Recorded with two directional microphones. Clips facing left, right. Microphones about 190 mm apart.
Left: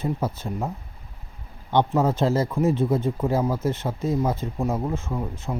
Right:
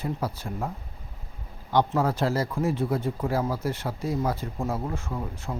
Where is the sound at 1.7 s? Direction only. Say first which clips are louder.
Left 3 dB; 20° left (ahead or behind).